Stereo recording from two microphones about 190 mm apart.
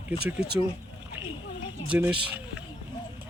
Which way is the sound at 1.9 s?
10° right (ahead or behind).